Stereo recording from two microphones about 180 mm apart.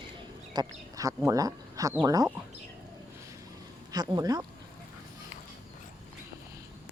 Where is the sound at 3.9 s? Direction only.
20° right (ahead or behind).